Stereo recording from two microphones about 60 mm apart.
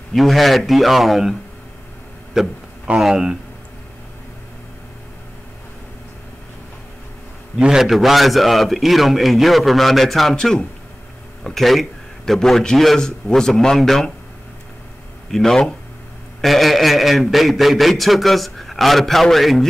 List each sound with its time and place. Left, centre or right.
0.1 s a man's voice: centre
2.4 s speech: centre
7.5 s a man's voice: centre
15.3 s a man's voice: centre